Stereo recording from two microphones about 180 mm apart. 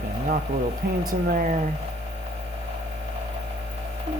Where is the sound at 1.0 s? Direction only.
50° right (ahead or behind).